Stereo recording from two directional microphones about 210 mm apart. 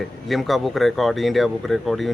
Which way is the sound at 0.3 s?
Centre (ahead or behind).